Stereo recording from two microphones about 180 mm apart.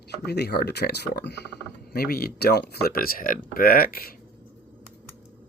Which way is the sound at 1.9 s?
55° left (ahead or behind).